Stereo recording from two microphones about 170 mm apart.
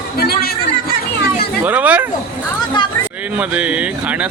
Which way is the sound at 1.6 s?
10° right (ahead or behind).